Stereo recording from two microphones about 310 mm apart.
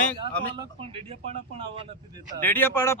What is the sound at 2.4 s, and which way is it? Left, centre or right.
Speech, centre.